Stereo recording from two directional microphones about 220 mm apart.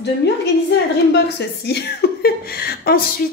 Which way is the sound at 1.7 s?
50° left (ahead or behind).